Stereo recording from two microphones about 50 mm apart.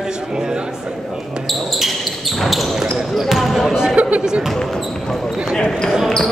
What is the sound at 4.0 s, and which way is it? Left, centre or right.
Chatter, right.